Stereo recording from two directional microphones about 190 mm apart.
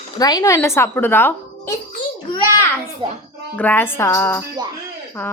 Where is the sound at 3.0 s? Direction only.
25° right (ahead or behind).